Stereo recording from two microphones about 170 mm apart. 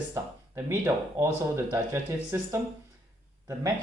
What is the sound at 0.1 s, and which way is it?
Speech, 15° right (ahead or behind).